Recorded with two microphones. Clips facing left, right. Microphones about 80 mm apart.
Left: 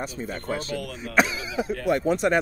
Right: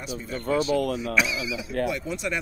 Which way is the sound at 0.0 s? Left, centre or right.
Left.